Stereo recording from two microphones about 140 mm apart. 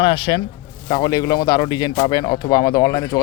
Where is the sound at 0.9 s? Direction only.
25° left (ahead or behind).